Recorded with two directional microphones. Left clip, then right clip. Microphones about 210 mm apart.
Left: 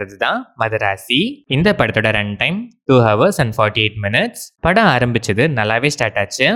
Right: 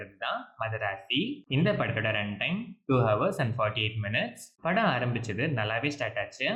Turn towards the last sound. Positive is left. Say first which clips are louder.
# left 15 dB
turn(degrees=55)  # may be behind; listen again after turning